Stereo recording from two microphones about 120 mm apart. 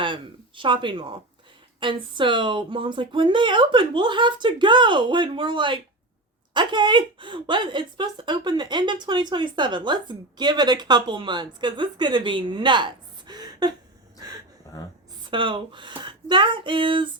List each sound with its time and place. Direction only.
0.0 s a woman's voice: 45° right (ahead or behind)
14.7 s a woman's voice: 30° left (ahead or behind)
15.2 s speech: 45° right (ahead or behind)